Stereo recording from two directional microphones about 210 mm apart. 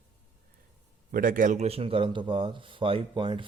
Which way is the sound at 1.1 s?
40° right (ahead or behind).